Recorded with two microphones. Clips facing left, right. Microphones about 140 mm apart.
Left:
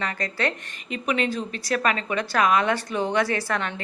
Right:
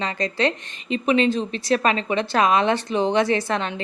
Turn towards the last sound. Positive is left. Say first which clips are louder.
# right 4 dB
turn(degrees=-20)  # may be behind; listen again after turning